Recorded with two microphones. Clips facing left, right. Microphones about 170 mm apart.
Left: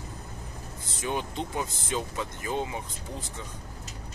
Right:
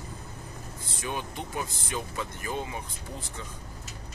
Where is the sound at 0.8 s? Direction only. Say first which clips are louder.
Left 3 dB; 20° left (ahead or behind).